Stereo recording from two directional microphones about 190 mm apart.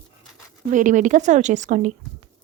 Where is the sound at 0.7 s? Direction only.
40° right (ahead or behind).